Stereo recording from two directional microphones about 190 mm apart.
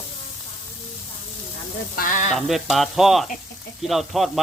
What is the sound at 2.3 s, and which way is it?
Speech, centre (ahead or behind).